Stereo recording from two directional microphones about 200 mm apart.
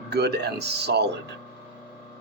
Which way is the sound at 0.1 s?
55° right (ahead or behind).